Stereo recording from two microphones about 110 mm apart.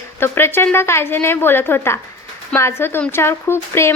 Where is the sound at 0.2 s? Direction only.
20° left (ahead or behind).